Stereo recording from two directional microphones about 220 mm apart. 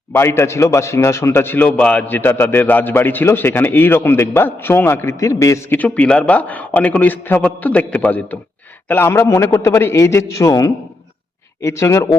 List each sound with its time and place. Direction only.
0.1 s a man's voice: 10° left (ahead or behind)